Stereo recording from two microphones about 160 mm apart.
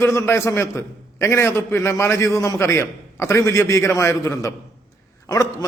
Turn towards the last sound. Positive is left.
turn(degrees=20)  # may be behind; listen again after turning